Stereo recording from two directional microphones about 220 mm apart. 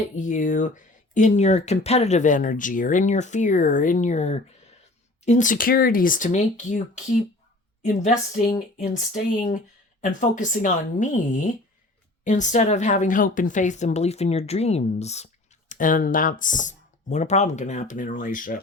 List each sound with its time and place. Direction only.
0.2 s speech: 35° left (ahead or behind)